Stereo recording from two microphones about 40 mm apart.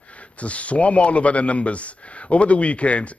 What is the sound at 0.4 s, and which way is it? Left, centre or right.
Speech, left.